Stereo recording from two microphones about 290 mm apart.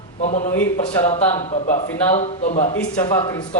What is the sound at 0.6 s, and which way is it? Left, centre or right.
Speech, centre.